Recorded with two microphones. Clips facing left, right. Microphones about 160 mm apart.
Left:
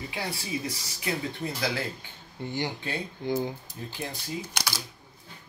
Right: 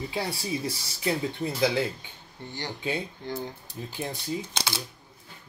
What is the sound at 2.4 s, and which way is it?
Speech, 15° left (ahead or behind).